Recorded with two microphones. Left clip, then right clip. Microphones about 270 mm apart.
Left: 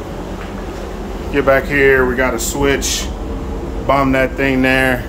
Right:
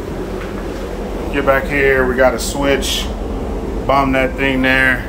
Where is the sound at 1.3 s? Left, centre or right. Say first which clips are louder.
Left 2 dB; left.